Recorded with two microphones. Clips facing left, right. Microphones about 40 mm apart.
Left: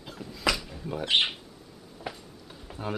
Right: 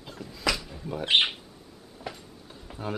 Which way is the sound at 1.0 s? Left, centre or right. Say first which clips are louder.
Right 2 dB; right.